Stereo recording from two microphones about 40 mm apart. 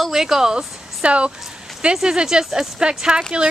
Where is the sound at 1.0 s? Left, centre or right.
Right.